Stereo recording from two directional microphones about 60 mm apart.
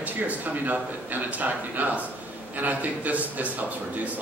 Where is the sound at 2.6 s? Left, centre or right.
Right.